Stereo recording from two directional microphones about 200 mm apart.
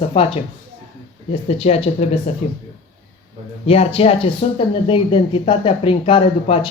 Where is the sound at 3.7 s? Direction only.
30° left (ahead or behind).